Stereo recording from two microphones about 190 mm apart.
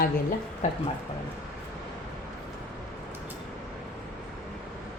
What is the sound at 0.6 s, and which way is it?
Speech, 35° left (ahead or behind).